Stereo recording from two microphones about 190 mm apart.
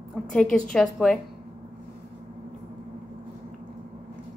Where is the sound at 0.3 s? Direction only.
Centre (ahead or behind).